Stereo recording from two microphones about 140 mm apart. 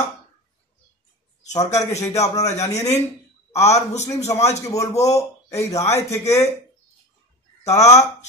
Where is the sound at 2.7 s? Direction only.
55° left (ahead or behind).